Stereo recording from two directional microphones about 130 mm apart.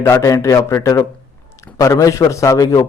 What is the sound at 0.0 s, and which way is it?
Speech, 25° left (ahead or behind).